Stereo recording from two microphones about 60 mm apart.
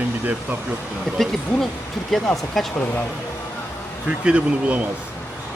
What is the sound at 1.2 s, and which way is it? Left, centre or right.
Speech, centre.